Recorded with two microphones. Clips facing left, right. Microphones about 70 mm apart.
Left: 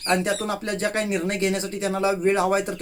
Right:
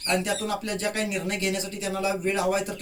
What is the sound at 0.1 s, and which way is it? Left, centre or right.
Speech, left.